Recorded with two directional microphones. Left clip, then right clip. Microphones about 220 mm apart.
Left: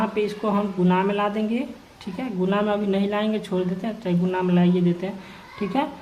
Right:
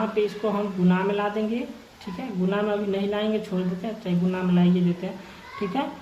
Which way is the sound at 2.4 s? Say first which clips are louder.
Left 2 dB; 45° left (ahead or behind).